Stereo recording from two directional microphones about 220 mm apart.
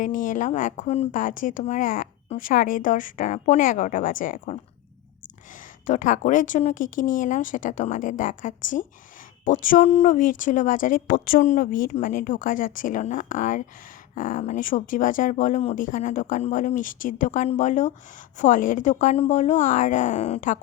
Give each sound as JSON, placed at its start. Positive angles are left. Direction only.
{"t": 0.0, "sound": "a woman's voice", "side_deg": 35}
{"t": 5.8, "sound": "a woman's voice", "side_deg": 35}